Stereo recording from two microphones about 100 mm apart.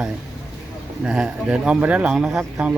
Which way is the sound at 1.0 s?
10° right (ahead or behind).